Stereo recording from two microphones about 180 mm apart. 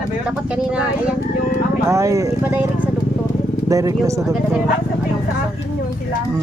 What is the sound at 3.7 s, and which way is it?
Speech, 20° right (ahead or behind).